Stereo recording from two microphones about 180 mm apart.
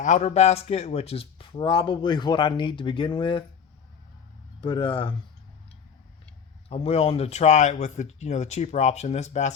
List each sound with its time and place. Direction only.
0.0 s speech: 40° left (ahead or behind)
4.6 s speech: 30° left (ahead or behind)
6.7 s speech: 35° left (ahead or behind)